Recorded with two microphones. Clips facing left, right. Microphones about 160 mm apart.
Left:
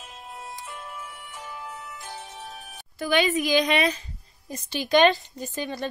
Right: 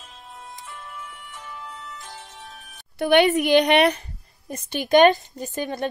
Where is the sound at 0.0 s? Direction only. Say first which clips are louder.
Left 2 dB; 5° left (ahead or behind).